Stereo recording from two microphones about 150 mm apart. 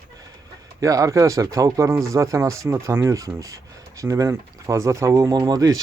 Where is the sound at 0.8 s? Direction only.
20° right (ahead or behind).